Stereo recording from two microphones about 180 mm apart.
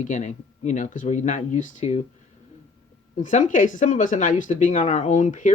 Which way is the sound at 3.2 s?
45° left (ahead or behind).